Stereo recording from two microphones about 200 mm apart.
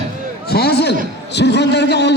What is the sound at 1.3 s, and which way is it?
Speech, 60° left (ahead or behind).